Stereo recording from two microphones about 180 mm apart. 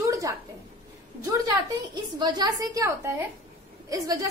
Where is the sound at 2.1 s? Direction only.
25° right (ahead or behind).